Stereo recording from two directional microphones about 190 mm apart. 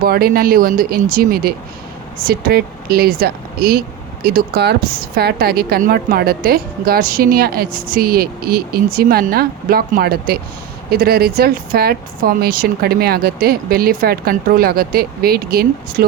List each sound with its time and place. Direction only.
0.0 s speech: 50° right (ahead or behind)